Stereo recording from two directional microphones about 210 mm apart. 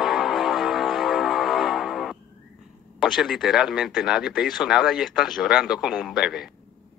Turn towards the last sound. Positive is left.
turn(degrees=0)  # may be behind; listen again after turning